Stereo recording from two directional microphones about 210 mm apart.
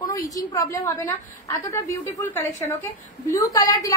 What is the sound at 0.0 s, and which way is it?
A woman's voice, 15° left (ahead or behind).